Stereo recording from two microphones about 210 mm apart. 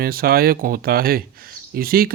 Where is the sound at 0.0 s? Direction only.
45° right (ahead or behind).